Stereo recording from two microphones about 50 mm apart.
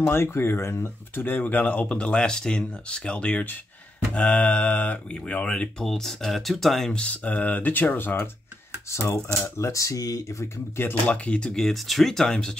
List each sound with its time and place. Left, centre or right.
0.0 s speech: left
1.1 s speech: left
5.1 s speech: left
5.9 s speech: centre
6.9 s speech: left
8.9 s speech: left
9.4 s speech: left
11.1 s speech: left
11.5 s speech: centre